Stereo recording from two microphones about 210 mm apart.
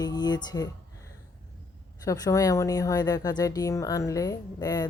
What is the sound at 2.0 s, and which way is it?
Speech, 15° left (ahead or behind).